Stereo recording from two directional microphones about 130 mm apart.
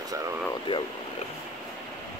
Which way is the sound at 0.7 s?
40° left (ahead or behind).